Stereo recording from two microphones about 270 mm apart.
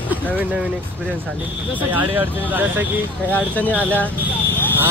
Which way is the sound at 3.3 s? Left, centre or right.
Centre.